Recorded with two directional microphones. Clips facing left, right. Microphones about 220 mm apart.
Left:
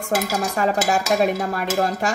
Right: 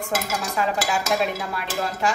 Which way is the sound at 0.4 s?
45° left (ahead or behind).